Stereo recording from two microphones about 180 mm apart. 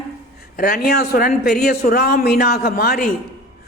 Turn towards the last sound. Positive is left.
turn(degrees=55)  # may be behind; listen again after turning